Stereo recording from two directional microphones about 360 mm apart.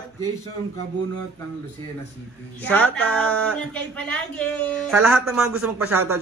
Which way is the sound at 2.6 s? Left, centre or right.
Centre.